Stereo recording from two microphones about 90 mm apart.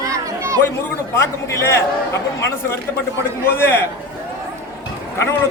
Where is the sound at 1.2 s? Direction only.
35° left (ahead or behind).